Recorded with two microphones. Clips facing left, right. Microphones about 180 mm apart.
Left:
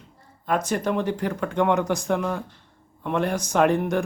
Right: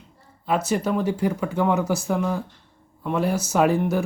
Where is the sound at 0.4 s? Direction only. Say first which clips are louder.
Right 1 dB; 10° right (ahead or behind).